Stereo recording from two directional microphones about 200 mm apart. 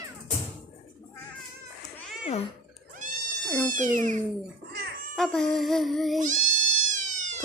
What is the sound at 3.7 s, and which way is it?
Speech, 40° right (ahead or behind).